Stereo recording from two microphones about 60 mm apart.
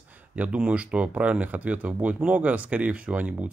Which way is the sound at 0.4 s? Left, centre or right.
Right.